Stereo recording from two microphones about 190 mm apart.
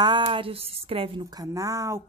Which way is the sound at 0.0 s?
25° right (ahead or behind).